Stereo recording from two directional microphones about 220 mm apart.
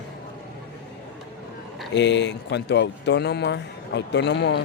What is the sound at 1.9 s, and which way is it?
Speech, 55° left (ahead or behind).